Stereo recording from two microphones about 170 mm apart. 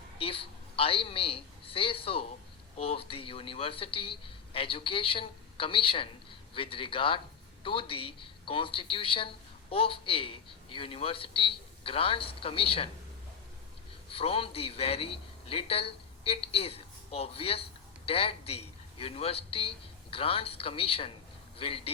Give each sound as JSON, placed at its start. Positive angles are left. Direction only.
{"t": 0.2, "sound": "a sound", "side_deg": 35}
{"t": 2.7, "sound": "a woman's voice", "side_deg": 35}
{"t": 14.1, "sound": "a man's voice", "side_deg": 35}